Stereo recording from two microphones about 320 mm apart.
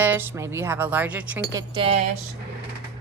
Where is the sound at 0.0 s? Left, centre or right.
Centre.